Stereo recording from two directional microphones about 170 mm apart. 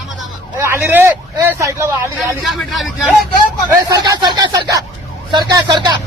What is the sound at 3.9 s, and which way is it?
A man's voice, 25° right (ahead or behind).